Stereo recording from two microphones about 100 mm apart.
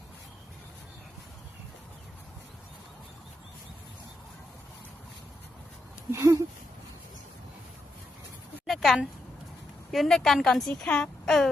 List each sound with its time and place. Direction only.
6.1 s speech: 25° right (ahead or behind)
8.6 s a sound: centre (ahead or behind)
9.9 s a woman's voice: centre (ahead or behind)